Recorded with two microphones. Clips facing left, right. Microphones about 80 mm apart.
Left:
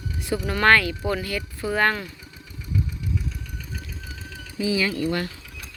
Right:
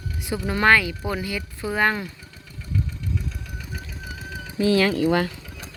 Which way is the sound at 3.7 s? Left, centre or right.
Centre.